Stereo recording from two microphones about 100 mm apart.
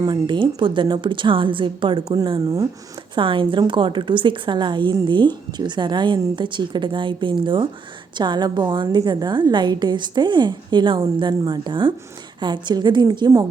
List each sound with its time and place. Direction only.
0.0 s a woman's voice: 50° right (ahead or behind)
2.0 s speech: 40° right (ahead or behind)
3.2 s a woman's voice: 55° right (ahead or behind); by 13.4 s 40° right (ahead or behind)